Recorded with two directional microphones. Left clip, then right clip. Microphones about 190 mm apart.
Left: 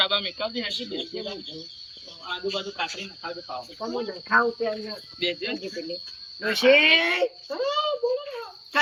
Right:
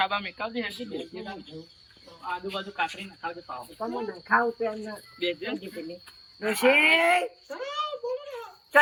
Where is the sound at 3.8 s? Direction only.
15° left (ahead or behind).